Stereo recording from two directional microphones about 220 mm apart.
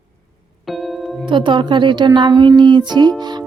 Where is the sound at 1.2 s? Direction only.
20° right (ahead or behind).